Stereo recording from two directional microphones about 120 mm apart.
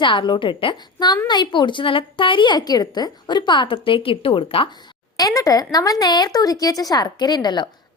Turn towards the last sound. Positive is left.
turn(degrees=35)  # may be behind; listen again after turning